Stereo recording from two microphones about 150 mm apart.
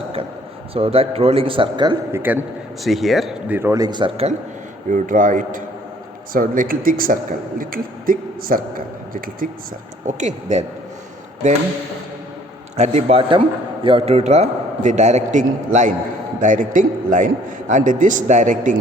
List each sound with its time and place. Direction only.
0.7 s a man's voice: 40° right (ahead or behind)
2.1 s a man's voice: 10° right (ahead or behind)
2.8 s speech: centre (ahead or behind)
3.5 s a man's voice: 15° right (ahead or behind); by 4.3 s 30° right (ahead or behind)
4.9 s a man's voice: 60° right (ahead or behind)
10.1 s a man's voice: 50° right (ahead or behind)
12.7 s a man's voice: 50° right (ahead or behind)